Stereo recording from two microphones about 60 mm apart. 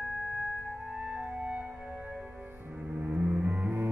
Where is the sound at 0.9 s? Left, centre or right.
Centre.